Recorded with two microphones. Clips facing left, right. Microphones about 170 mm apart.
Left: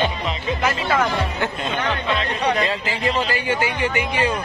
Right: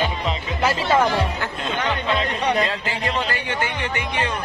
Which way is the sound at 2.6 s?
Centre (ahead or behind).